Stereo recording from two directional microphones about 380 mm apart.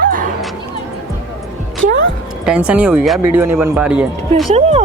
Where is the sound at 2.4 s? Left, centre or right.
Centre.